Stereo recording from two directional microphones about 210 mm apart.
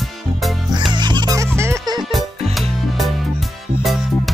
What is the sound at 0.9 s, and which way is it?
Music, 20° right (ahead or behind).